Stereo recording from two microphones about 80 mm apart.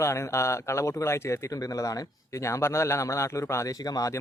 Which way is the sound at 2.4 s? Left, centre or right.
Left.